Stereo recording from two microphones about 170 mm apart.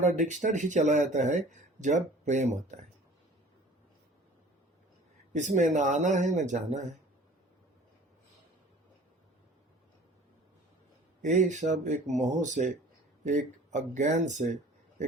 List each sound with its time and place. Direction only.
0.2 s speech: 45° right (ahead or behind)
5.3 s speech: 45° right (ahead or behind)
11.2 s speech: 45° right (ahead or behind)